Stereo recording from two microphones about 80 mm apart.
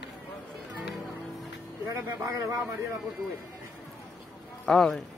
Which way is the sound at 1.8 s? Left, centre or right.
Right.